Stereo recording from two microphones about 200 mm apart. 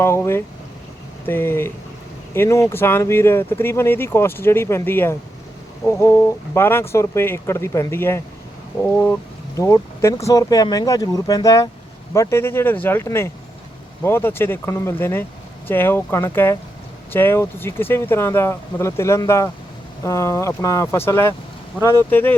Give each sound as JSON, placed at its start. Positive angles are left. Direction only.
{"t": 0.0, "sound": "speech", "side_deg": 10}